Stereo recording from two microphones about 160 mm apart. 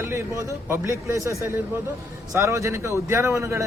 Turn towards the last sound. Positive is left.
turn(degrees=-15)  # may be behind; listen again after turning